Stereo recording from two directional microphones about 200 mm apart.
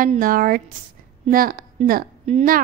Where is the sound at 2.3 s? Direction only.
30° right (ahead or behind).